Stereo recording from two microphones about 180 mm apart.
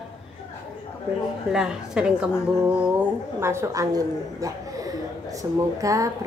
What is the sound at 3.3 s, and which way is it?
A child's voice, 15° right (ahead or behind).